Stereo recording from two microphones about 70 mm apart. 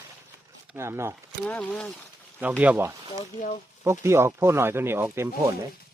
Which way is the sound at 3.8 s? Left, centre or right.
Right.